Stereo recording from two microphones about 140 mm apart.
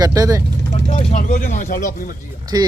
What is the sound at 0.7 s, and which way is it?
Speech, 50° left (ahead or behind).